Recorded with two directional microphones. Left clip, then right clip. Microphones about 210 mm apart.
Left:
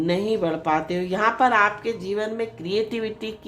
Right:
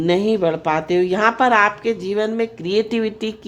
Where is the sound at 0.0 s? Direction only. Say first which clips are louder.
Right 6 dB; 45° right (ahead or behind).